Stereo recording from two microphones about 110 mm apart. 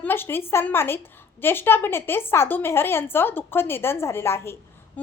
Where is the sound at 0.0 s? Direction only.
20° left (ahead or behind).